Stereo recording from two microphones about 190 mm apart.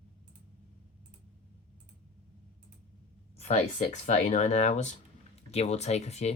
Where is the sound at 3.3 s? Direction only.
35° left (ahead or behind).